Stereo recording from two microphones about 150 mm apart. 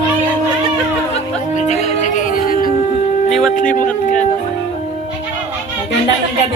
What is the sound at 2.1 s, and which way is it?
Music, 65° left (ahead or behind).